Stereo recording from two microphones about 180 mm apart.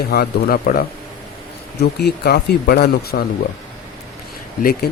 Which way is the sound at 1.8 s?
65° left (ahead or behind).